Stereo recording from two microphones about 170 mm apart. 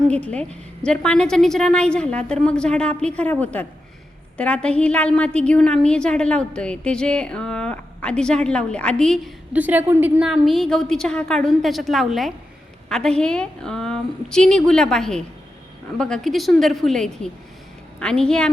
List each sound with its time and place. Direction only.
0.1 s a woman's voice: 5° left (ahead or behind)
9.5 s a woman's voice: 10° right (ahead or behind)